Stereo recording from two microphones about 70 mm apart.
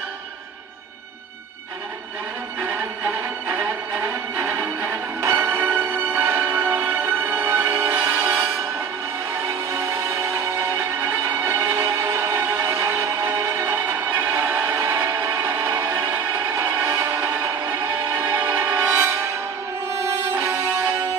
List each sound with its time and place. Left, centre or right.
3.1 s music: right
7.9 s music: right
9.7 s music: right
17.0 s music: right
20.1 s music: right